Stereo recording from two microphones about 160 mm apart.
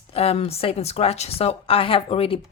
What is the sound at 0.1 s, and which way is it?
Speech, 40° left (ahead or behind).